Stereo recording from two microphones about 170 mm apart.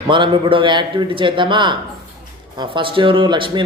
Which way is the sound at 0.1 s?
30° right (ahead or behind).